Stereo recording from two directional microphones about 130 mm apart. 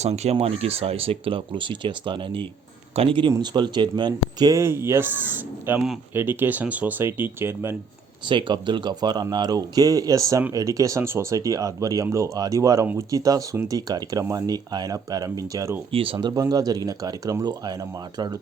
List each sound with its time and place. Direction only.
0.0 s speech: 55° right (ahead or behind); by 7.8 s 20° right (ahead or behind)
8.3 s speech: 40° right (ahead or behind)
15.9 s speech: 45° right (ahead or behind)